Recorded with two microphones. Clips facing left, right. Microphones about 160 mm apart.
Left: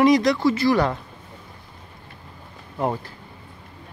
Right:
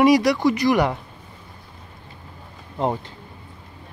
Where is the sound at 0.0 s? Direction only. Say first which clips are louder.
Right 1 dB; 10° right (ahead or behind).